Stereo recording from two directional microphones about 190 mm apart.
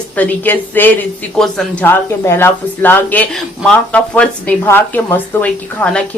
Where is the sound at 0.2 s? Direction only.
10° left (ahead or behind).